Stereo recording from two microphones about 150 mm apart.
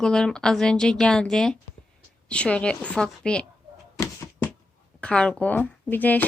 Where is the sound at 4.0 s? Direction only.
20° left (ahead or behind).